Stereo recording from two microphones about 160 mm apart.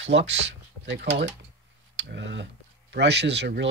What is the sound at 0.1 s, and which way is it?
Speech, 90° right.